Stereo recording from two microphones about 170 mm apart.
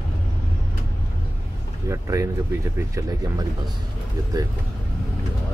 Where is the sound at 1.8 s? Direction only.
15° right (ahead or behind).